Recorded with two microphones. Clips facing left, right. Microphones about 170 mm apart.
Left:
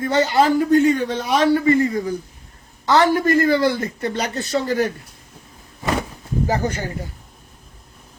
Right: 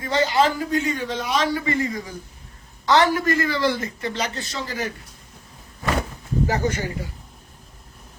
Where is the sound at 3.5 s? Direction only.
40° left (ahead or behind).